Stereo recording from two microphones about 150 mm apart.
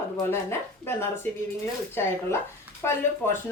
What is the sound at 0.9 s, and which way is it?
Speech, 15° left (ahead or behind).